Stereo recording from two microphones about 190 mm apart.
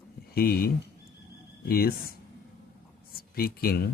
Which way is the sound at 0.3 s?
50° left (ahead or behind).